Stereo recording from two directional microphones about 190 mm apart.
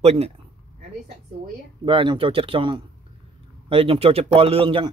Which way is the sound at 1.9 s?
25° right (ahead or behind).